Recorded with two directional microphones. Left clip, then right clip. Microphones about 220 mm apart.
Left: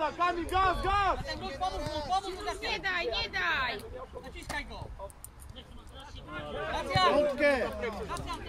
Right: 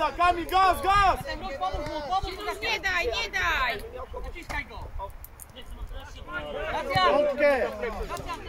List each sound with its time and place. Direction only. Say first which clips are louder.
0.0 s a man's voice: right 6 dB; 50° right (ahead or behind)
1.2 s speech: right 3 dB; 50° left (ahead or behind)
2.7 s a woman's voice: right 5 dB; 20° right (ahead or behind)
4.4 s speech: right 3 dB; 50° left (ahead or behind)
6.5 s speech: right 3 dB; 50° left (ahead or behind)